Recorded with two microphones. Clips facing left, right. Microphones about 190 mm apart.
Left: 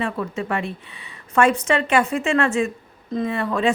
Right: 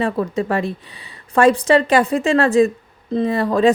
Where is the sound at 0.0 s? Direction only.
35° right (ahead or behind).